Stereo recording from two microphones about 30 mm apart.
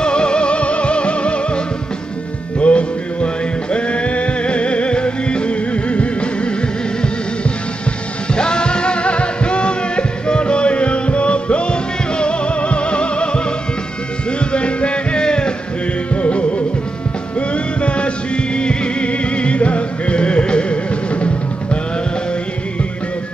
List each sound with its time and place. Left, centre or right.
0.0 s music: left
2.6 s music: left
8.3 s music: left
14.5 s music: left
16.2 s music: left